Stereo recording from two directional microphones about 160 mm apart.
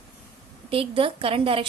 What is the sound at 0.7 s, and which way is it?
Speech, 35° right (ahead or behind).